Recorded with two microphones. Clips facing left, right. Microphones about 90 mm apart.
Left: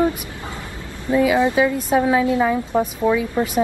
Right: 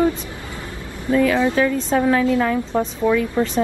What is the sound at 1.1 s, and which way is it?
A woman's voice, 15° left (ahead or behind).